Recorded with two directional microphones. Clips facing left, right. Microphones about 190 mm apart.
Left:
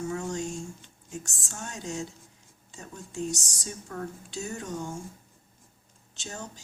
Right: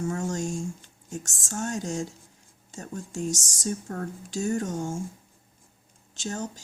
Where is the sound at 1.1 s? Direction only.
45° right (ahead or behind).